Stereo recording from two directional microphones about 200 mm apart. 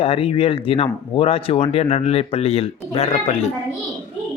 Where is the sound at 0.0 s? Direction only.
30° left (ahead or behind).